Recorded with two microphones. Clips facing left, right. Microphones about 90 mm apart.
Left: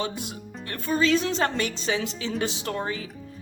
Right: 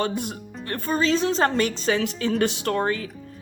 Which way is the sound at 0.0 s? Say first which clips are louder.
Right 5 dB; 50° right (ahead or behind).